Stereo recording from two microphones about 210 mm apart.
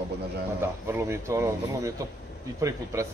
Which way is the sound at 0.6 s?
15° right (ahead or behind).